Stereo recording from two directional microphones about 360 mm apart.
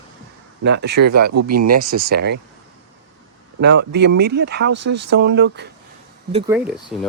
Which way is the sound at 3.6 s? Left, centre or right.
Right.